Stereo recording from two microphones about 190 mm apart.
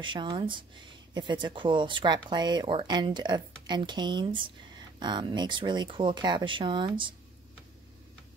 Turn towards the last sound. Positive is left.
turn(degrees=-25)  # may be behind; listen again after turning